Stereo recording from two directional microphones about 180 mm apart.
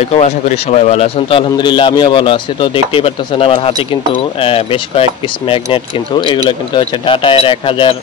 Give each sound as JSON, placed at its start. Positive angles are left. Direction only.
{"t": 0.2, "sound": "a man's voice", "side_deg": 40}